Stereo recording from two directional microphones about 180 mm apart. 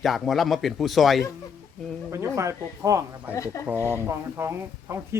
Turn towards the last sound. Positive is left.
turn(degrees=-15)  # may be behind; listen again after turning